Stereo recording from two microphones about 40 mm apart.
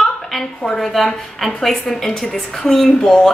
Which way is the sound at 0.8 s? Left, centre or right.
Centre.